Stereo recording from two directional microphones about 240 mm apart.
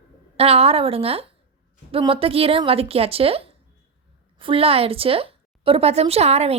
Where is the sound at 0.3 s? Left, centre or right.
Right.